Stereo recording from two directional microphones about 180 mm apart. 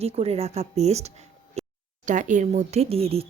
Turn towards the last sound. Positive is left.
turn(degrees=-35)  # may be behind; listen again after turning